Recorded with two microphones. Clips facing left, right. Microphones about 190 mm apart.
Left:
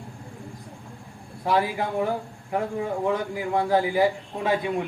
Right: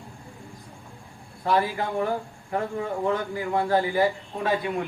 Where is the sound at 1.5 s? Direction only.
15° left (ahead or behind).